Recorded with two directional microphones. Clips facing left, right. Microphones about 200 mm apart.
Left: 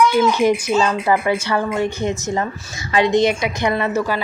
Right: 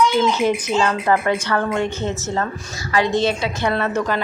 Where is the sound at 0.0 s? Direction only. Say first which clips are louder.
Left 2 dB; 10° left (ahead or behind).